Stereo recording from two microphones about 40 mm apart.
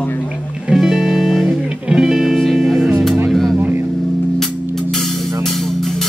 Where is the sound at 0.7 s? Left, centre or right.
Centre.